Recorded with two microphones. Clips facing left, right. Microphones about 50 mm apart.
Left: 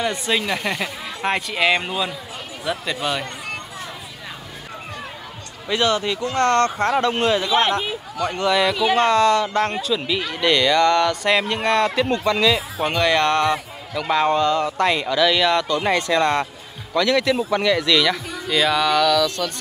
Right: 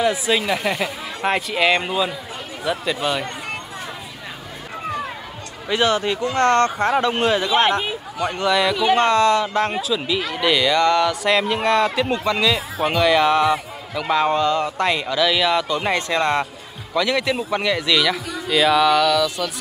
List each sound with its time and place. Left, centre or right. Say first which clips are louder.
0.0 s speech: right 3 dB; centre
5.7 s speech: right 1 dB; centre
7.4 s speech: right 1 dB; right
8.2 s speech: even; centre
8.5 s speech: right 1 dB; centre
15.9 s speech: left 2 dB; centre